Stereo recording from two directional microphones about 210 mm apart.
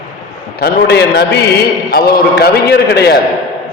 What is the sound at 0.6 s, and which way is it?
A man's voice, 50° left (ahead or behind).